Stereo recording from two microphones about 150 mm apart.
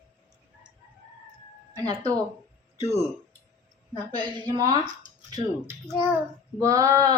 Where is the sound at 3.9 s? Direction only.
30° right (ahead or behind).